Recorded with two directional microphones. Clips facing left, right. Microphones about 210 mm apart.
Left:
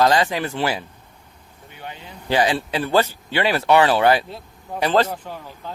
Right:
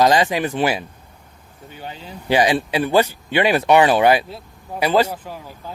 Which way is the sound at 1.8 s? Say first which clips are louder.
Right 2 dB; 35° right (ahead or behind).